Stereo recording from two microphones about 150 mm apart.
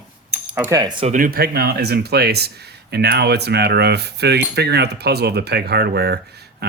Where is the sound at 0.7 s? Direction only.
25° right (ahead or behind).